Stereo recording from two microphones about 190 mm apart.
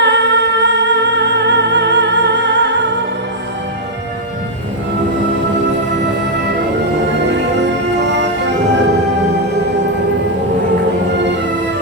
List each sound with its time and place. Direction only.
0.0 s music: 65° right (ahead or behind)
7.3 s music: 65° right (ahead or behind)